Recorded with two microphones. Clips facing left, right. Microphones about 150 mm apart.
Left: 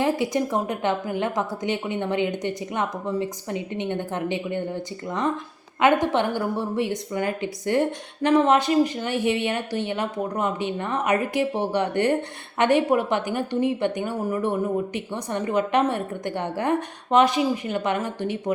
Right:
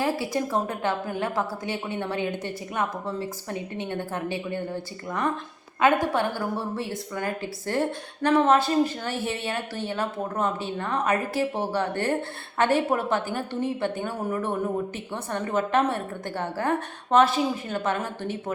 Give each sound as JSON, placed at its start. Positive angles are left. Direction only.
{"t": 0.0, "sound": "a woman's voice", "side_deg": 20}